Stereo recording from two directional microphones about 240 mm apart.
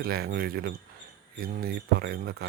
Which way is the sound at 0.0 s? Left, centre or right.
Right.